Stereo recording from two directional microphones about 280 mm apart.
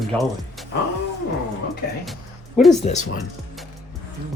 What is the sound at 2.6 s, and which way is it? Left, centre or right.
Speech, centre.